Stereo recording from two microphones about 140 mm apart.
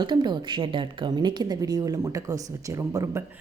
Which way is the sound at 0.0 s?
30° right (ahead or behind).